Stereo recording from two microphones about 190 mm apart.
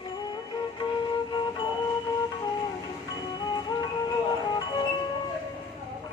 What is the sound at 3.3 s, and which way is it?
Music, 20° left (ahead or behind).